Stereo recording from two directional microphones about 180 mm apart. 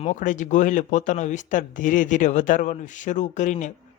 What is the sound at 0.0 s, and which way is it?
Speech, 45° left (ahead or behind).